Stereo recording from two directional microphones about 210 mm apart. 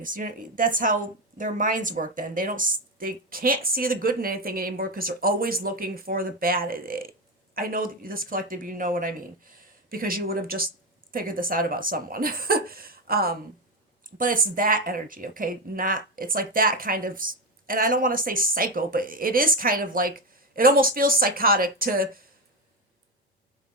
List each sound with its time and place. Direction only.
0.0 s speech: 40° right (ahead or behind)